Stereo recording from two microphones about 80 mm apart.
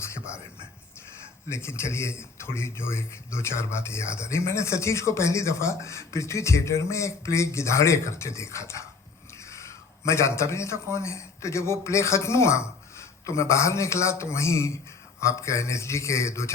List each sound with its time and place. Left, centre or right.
1.5 s a man's voice: left